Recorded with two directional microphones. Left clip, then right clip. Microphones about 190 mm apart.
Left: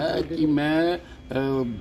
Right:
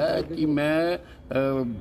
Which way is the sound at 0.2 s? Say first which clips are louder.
Left 3 dB; 55° right (ahead or behind).